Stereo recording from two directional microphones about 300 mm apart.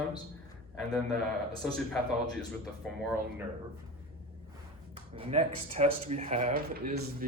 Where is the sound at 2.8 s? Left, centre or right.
Centre.